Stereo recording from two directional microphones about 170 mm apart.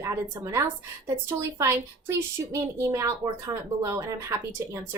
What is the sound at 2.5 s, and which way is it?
A woman's voice, 15° right (ahead or behind).